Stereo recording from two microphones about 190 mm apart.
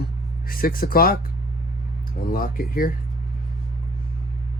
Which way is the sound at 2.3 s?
50° left (ahead or behind).